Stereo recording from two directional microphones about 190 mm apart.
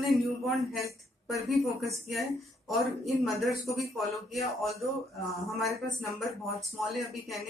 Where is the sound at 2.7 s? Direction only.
Centre (ahead or behind).